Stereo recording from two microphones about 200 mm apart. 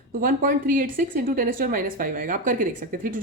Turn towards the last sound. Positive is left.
turn(degrees=-45)  # may be behind; listen again after turning